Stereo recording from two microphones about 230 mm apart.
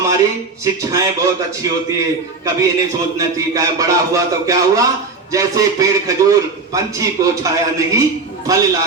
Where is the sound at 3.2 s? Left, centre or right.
Centre.